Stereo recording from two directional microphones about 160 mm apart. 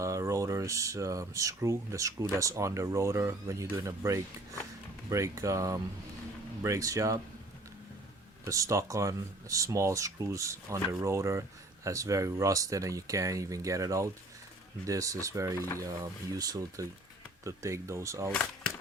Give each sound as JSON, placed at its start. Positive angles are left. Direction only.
{"t": 0.0, "sound": "speech", "side_deg": -20}
{"t": 8.4, "sound": "speech", "side_deg": -20}
{"t": 18.3, "sound": "a sound", "side_deg": 10}